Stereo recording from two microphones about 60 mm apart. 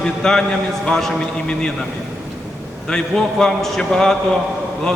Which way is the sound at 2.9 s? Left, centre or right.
Centre.